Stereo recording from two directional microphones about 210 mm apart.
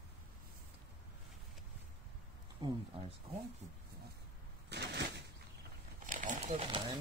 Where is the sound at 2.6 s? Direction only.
20° right (ahead or behind).